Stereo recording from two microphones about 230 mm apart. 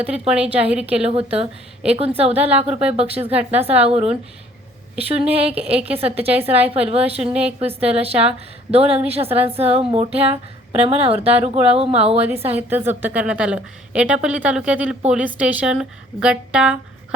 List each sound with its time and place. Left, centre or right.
0.0 s a woman's voice: centre
1.0 s a woman's voice: right
2.3 s speech: centre
2.6 s a woman's voice: right
12.2 s a woman's voice: centre